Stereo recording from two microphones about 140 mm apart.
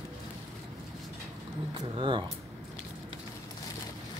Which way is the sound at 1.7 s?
35° right (ahead or behind).